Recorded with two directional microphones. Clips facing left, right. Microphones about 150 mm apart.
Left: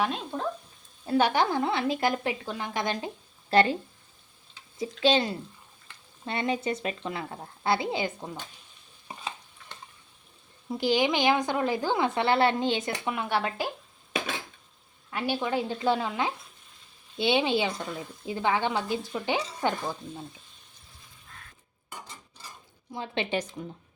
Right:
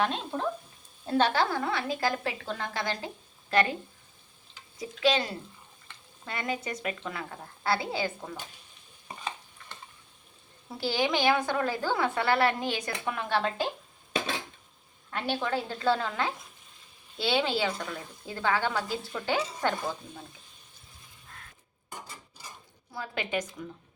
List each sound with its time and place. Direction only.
0.0 s speech: centre (ahead or behind)
1.3 s speech: 20° left (ahead or behind)
3.5 s speech: 30° left (ahead or behind)
4.8 s speech: 30° left (ahead or behind)
10.8 s speech: 15° left (ahead or behind)
13.1 s speech: 15° left (ahead or behind)
15.1 s speech: 10° left (ahead or behind)
22.9 s speech: 25° left (ahead or behind)